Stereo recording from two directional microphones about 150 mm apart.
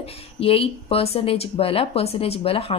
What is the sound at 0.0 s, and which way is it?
A woman's voice, 40° left (ahead or behind).